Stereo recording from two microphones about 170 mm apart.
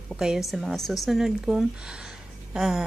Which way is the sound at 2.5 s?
5° right (ahead or behind).